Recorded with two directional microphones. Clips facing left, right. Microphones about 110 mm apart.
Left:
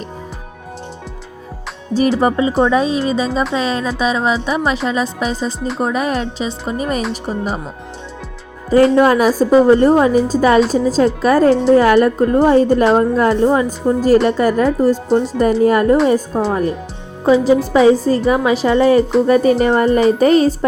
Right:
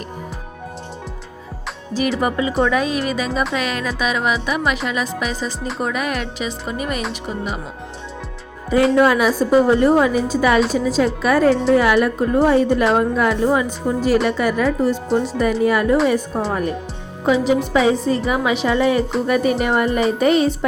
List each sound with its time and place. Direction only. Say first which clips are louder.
2.0 s speech: left 5 dB; 30° left (ahead or behind)
5.5 s speech: left 4 dB; centre (ahead or behind)
5.8 s speech: left 5 dB; 30° left (ahead or behind)
9.0 s a woman's voice: left 3 dB; 40° left (ahead or behind)